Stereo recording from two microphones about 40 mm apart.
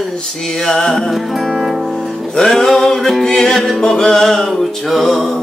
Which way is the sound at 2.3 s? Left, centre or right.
Centre.